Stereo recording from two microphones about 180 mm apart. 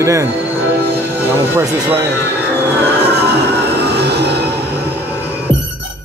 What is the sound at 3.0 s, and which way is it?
Music, 65° right (ahead or behind).